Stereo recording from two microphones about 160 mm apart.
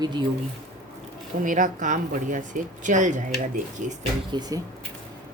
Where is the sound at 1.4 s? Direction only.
55° right (ahead or behind).